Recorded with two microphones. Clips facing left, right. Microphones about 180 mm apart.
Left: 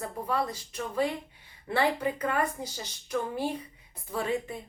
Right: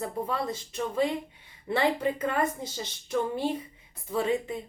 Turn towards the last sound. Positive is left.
turn(degrees=-20)  # may be behind; listen again after turning